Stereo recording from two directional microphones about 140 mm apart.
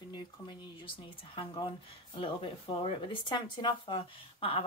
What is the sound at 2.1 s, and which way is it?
Speech, 40° left (ahead or behind).